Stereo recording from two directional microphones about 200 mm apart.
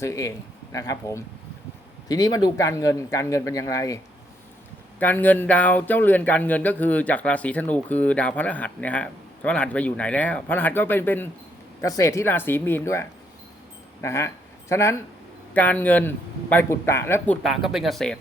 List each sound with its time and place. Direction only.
0.0 s speech: 15° left (ahead or behind)
17.4 s speech: centre (ahead or behind)